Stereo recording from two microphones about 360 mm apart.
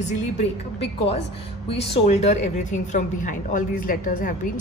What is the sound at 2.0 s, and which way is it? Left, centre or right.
A woman's voice, centre.